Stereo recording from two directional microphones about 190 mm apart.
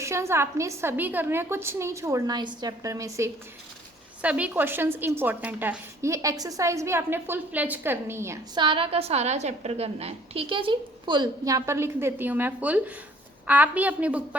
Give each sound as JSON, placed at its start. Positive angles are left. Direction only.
{"t": 0.0, "sound": "a woman's voice", "side_deg": -15}
{"t": 8.6, "sound": "a woman's voice", "side_deg": -30}